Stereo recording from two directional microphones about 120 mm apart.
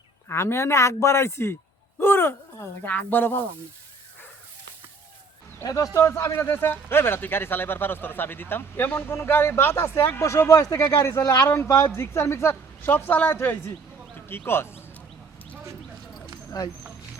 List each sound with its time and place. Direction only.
0.3 s a man's voice: 20° left (ahead or behind)
2.0 s a sound: 20° left (ahead or behind)
2.8 s speech: 15° left (ahead or behind)
5.6 s a man's voice: 30° left (ahead or behind)